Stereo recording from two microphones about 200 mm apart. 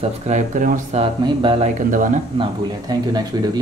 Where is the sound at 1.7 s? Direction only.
40° right (ahead or behind).